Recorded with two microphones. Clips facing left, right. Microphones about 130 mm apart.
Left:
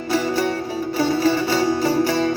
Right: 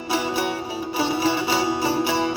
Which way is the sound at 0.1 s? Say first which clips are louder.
Left 3 dB; 15° right (ahead or behind).